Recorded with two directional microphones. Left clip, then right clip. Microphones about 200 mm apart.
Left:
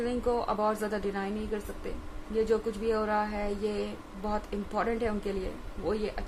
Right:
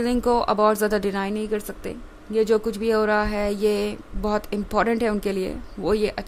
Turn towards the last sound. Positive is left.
turn(degrees=-55)  # may be behind; listen again after turning